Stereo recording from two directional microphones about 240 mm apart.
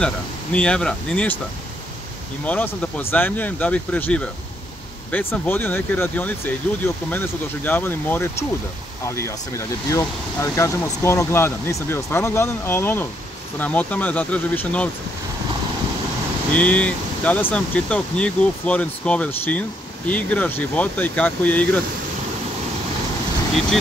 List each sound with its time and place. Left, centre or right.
0.0 s speech: centre
2.4 s speech: centre
16.5 s speech: centre